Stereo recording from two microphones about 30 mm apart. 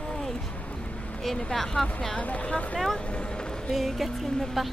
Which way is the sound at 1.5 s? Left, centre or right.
Centre.